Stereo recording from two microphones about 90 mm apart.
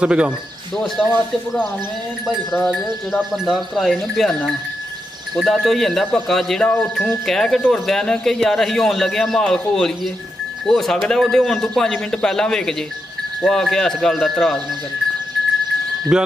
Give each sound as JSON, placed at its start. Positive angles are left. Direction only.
{"t": 0.0, "sound": "speech", "side_deg": -10}
{"t": 0.8, "sound": "a man's voice", "side_deg": 5}
{"t": 2.6, "sound": "a man's voice", "side_deg": 5}
{"t": 6.8, "sound": "speech", "side_deg": 20}
{"t": 7.2, "sound": "a man's voice", "side_deg": 5}
{"t": 16.1, "sound": "speech", "side_deg": -5}